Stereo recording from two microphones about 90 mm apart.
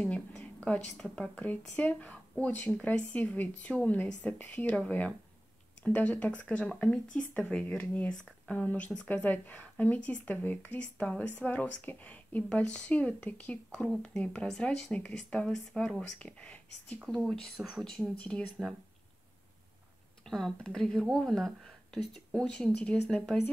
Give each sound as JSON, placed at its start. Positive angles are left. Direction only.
{"t": 0.7, "sound": "speech", "side_deg": 15}
{"t": 17.2, "sound": "speech", "side_deg": -5}
{"t": 20.2, "sound": "speech", "side_deg": 5}